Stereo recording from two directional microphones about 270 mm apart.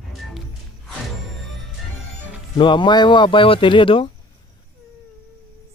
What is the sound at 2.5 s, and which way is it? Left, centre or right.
Speech, centre.